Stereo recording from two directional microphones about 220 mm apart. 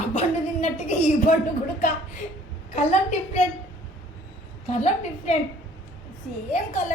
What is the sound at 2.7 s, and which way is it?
Speech, 30° left (ahead or behind).